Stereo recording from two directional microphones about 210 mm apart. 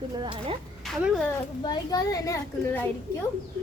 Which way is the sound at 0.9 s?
Centre (ahead or behind).